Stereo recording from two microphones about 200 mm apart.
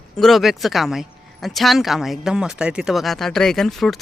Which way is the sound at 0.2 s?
Centre (ahead or behind).